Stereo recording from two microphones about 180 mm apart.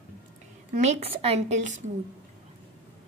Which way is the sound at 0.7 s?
35° right (ahead or behind).